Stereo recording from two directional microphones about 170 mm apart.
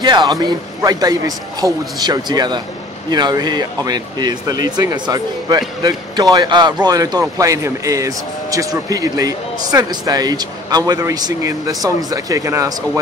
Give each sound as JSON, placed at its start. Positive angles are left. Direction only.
{"t": 0.0, "sound": "speech", "side_deg": -25}